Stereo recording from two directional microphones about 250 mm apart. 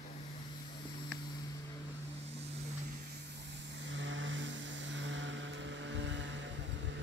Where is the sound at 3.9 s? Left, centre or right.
Right.